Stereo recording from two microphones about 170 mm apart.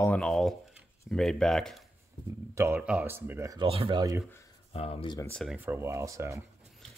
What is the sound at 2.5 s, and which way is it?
Speech, 15° right (ahead or behind).